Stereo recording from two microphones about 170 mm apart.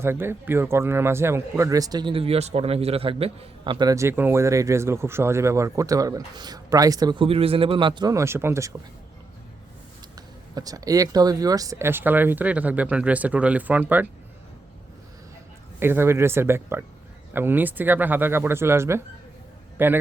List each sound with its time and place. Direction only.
0.0 s a man's voice: 15° right (ahead or behind)
10.5 s speech: 20° right (ahead or behind)
15.8 s speech: 15° right (ahead or behind)